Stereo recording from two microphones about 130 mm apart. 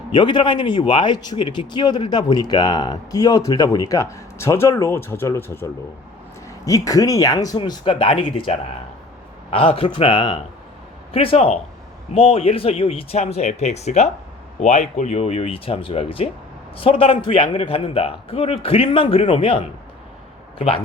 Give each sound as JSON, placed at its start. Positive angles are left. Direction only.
{"t": 0.1, "sound": "a man's voice", "side_deg": 35}